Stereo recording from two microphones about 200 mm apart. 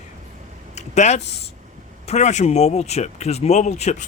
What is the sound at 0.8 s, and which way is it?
A man's voice, 35° left (ahead or behind).